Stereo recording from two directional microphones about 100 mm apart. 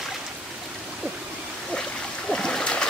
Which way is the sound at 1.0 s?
20° right (ahead or behind).